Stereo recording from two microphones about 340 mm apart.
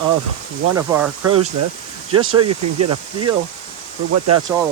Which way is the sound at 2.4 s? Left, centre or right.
Right.